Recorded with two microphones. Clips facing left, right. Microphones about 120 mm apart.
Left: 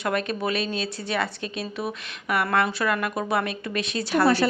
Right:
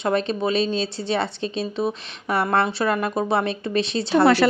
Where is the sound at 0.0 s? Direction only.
25° right (ahead or behind).